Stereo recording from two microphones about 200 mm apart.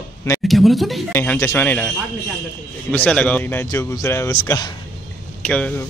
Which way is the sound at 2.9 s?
5° left (ahead or behind).